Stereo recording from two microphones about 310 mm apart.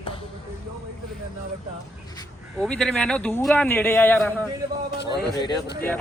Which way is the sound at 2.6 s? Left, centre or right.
Centre.